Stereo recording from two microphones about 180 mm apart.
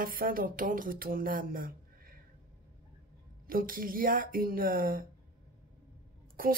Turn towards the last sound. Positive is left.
turn(degrees=-50)  # may be behind; listen again after turning